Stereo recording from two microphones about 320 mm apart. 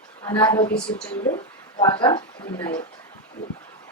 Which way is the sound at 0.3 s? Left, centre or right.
Centre.